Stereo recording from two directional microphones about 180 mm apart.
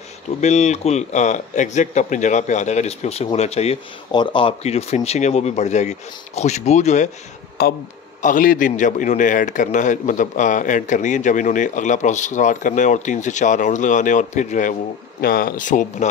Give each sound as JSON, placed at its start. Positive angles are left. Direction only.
{"t": 0.4, "sound": "speech", "side_deg": 40}
{"t": 7.6, "sound": "speech", "side_deg": 60}
{"t": 8.2, "sound": "a man's voice", "side_deg": 45}
{"t": 15.1, "sound": "a man's voice", "side_deg": 55}